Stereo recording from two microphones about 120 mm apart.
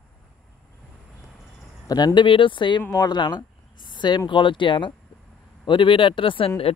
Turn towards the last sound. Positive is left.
turn(degrees=45)  # may be behind; listen again after turning